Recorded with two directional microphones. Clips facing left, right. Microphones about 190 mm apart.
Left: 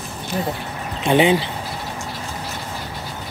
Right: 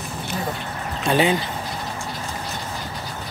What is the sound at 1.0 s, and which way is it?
Speech, 20° left (ahead or behind).